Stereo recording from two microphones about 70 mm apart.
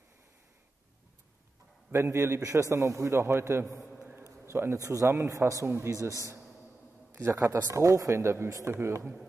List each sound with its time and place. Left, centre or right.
1.9 s a man's voice: right
4.2 s a sound: right
4.7 s speech: right
8.7 s a man's voice: right